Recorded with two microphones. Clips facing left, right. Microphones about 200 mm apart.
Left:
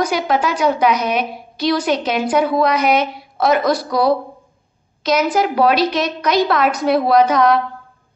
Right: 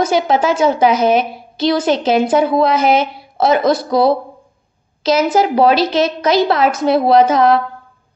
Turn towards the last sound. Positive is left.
turn(degrees=-30)  # may be behind; listen again after turning